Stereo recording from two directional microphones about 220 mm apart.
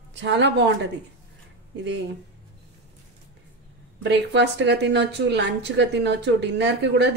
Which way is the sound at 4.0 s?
50° right (ahead or behind).